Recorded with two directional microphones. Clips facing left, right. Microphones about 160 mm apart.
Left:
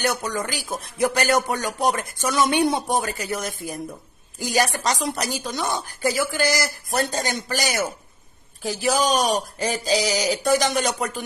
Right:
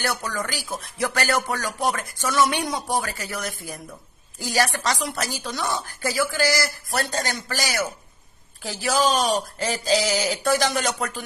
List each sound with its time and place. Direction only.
0.0 s speech: 20° left (ahead or behind)